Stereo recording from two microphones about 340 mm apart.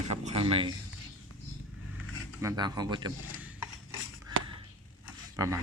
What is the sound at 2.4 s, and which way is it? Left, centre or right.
Speech, centre.